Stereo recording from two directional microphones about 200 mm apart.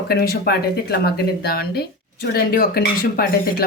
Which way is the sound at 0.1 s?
50° left (ahead or behind).